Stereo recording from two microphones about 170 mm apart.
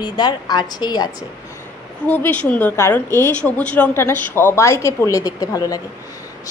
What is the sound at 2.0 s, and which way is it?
A woman's voice, 10° left (ahead or behind).